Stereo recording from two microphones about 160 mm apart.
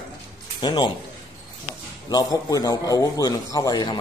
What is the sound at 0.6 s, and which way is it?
Speech, 25° left (ahead or behind).